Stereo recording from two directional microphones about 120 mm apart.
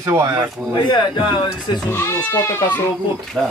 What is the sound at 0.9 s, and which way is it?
Speech, 40° left (ahead or behind).